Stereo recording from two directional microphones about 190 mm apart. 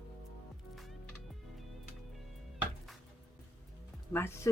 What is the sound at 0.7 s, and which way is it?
Music, centre (ahead or behind).